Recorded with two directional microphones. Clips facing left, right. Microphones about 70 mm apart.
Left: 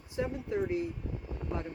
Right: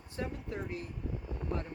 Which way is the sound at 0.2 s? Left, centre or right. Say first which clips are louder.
Left 6 dB; centre.